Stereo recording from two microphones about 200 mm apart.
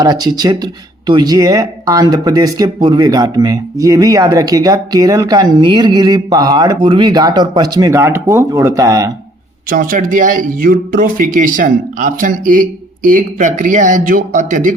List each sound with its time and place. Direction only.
0.0 s speech: 20° right (ahead or behind)
9.6 s a man's voice: 45° right (ahead or behind)